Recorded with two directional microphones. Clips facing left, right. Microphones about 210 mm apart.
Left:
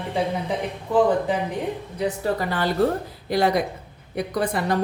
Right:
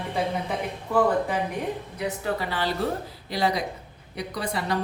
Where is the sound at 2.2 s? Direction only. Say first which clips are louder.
Left 2 dB; 45° left (ahead or behind).